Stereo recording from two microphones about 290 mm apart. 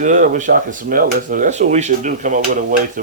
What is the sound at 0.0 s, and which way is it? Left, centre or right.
Speech, right.